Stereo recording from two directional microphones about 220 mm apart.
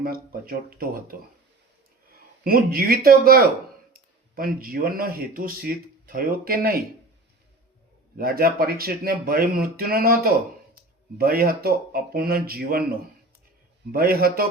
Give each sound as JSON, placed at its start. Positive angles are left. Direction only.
{"t": 0.0, "sound": "speech", "side_deg": -40}
{"t": 2.4, "sound": "speech", "side_deg": -45}
{"t": 8.1, "sound": "speech", "side_deg": -45}
{"t": 13.9, "sound": "speech", "side_deg": -45}